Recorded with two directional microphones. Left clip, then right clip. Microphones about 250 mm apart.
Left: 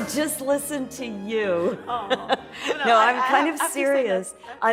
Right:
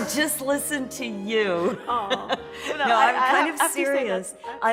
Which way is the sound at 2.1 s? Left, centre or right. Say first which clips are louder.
Left 2 dB; left.